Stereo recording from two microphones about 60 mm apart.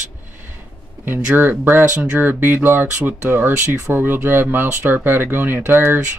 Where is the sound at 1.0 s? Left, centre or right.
Right.